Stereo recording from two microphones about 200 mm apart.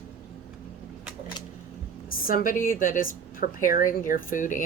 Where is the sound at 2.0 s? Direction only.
45° left (ahead or behind).